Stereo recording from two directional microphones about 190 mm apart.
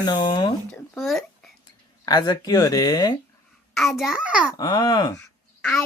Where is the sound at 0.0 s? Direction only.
25° left (ahead or behind).